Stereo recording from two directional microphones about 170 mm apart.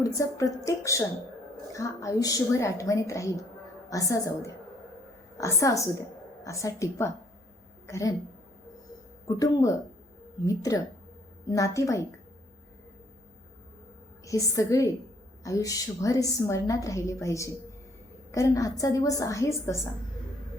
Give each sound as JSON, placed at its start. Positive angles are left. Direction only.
{"t": 0.0, "sound": "a woman's voice", "side_deg": 20}
{"t": 9.2, "sound": "a woman's voice", "side_deg": 20}
{"t": 14.3, "sound": "a woman's voice", "side_deg": 20}